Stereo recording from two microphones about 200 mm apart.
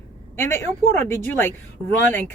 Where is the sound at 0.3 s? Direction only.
10° left (ahead or behind).